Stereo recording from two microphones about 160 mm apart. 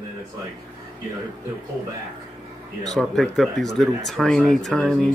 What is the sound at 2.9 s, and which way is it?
Speech, centre (ahead or behind).